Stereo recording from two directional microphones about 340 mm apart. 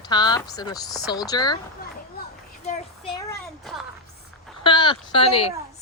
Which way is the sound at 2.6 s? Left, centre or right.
Centre.